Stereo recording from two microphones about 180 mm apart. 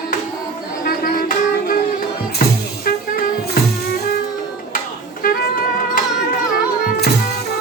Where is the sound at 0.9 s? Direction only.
50° left (ahead or behind).